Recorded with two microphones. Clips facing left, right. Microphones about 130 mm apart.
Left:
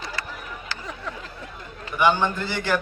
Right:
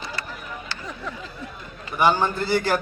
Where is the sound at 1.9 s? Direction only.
40° right (ahead or behind).